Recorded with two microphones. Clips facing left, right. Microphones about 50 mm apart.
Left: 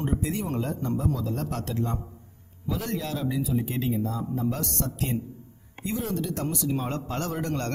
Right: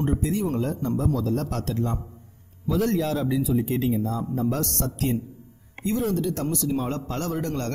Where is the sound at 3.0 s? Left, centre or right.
Right.